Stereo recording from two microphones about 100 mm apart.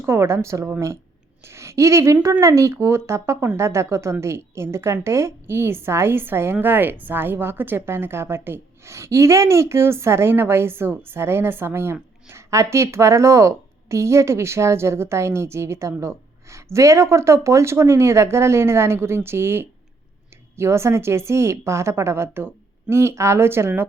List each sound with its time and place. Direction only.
0.0 s a woman's voice: 25° right (ahead or behind)